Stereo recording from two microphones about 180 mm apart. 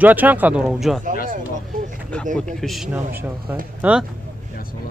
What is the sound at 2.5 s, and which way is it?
Speech, centre (ahead or behind).